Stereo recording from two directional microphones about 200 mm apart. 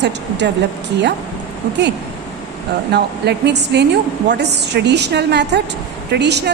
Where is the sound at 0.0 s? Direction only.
60° right (ahead or behind).